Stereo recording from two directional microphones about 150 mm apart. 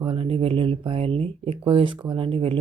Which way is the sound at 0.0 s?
35° right (ahead or behind).